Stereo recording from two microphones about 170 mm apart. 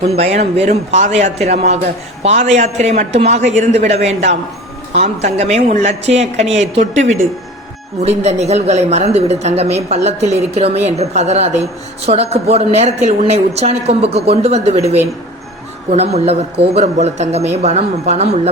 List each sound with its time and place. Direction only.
0.0 s speech: 40° right (ahead or behind)
8.0 s speech: 40° right (ahead or behind)